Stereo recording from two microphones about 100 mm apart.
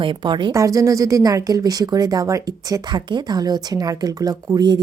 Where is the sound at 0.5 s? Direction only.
35° right (ahead or behind).